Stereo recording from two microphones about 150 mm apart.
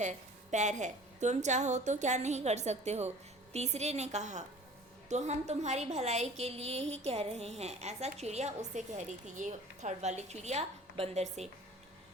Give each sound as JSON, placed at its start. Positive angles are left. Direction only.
{"t": 0.0, "sound": "a woman's voice", "side_deg": -55}